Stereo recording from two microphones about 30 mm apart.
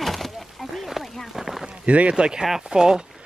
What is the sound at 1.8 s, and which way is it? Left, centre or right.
Speech, right.